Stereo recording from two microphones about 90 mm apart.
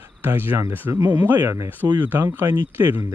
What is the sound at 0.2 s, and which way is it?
Speech, 25° right (ahead or behind).